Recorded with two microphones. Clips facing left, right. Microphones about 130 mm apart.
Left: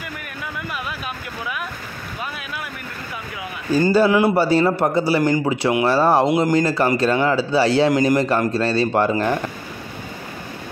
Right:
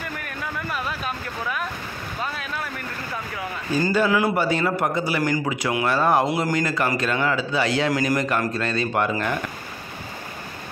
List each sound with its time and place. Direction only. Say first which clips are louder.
3.9 s a man's voice: left 5 dB; 30° left (ahead or behind)